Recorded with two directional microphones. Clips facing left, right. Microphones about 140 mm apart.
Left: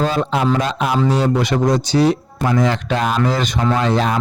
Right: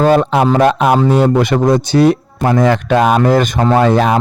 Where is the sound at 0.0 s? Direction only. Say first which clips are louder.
Right 7 dB; 60° right (ahead or behind).